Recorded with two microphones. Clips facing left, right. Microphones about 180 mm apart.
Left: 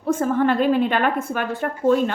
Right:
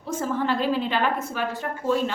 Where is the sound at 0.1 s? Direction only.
55° left (ahead or behind).